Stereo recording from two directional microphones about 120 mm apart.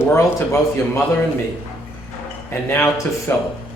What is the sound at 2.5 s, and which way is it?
Speech, 20° left (ahead or behind).